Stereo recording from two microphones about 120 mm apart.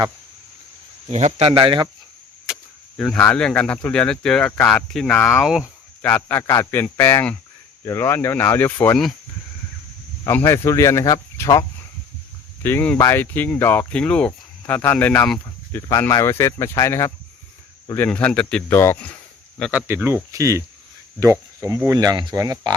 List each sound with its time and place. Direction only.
1.1 s speech: 65° right (ahead or behind); by 1.9 s 45° right (ahead or behind)
3.0 s speech: centre (ahead or behind)
5.4 s speech: 5° right (ahead or behind)
6.0 s a man's voice: 15° left (ahead or behind)
10.2 s speech: 20° left (ahead or behind)
12.6 s speech: 15° left (ahead or behind)
15.9 s speech: 25° left (ahead or behind)
17.9 s speech: 15° left (ahead or behind)
18.7 s speech: 20° left (ahead or behind)
19.7 s speech: 15° right (ahead or behind)
20.3 s speech: 25° right (ahead or behind)